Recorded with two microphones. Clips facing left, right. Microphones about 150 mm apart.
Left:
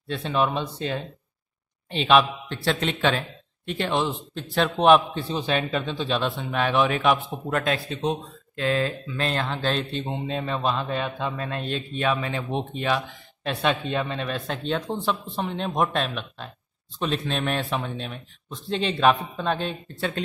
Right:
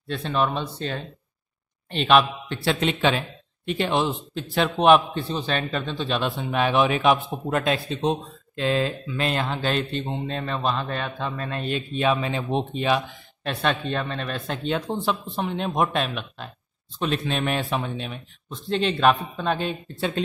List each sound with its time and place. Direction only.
0.1 s a man's voice: 5° left (ahead or behind); by 4.6 s 15° right (ahead or behind)
4.6 s a man's voice: 5° right (ahead or behind)
5.3 s speech: 10° left (ahead or behind)
6.3 s a man's voice: 15° right (ahead or behind)
10.0 s a man's voice: 5° left (ahead or behind)
12.0 s speech: 20° right (ahead or behind)
13.4 s a man's voice: 5° left (ahead or behind)
14.6 s a man's voice: 10° right (ahead or behind)